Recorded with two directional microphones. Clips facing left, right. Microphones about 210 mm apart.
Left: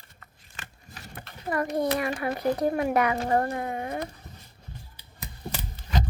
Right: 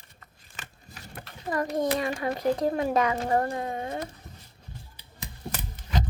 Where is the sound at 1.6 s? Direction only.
25° right (ahead or behind).